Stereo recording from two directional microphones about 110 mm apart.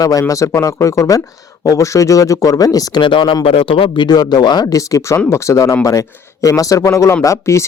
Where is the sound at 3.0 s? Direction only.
50° left (ahead or behind).